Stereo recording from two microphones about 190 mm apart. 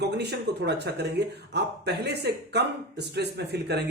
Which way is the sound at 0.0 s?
60° right (ahead or behind).